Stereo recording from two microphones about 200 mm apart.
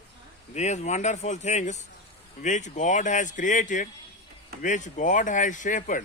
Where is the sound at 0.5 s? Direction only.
35° left (ahead or behind).